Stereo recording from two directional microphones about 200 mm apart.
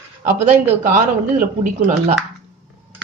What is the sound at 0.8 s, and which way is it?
Speech, 40° right (ahead or behind).